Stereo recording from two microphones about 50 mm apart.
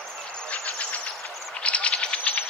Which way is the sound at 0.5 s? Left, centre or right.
Left.